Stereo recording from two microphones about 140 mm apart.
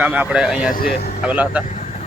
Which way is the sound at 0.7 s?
90° left.